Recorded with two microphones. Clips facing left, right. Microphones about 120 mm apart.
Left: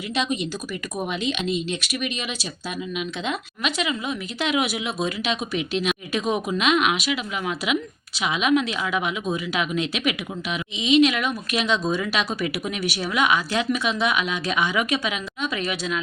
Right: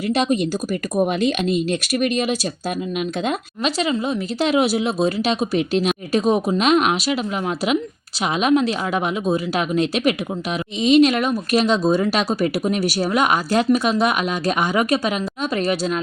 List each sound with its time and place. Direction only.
0.1 s speech: 45° right (ahead or behind)